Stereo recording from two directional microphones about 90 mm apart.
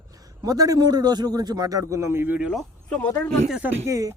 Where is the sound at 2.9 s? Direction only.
15° left (ahead or behind).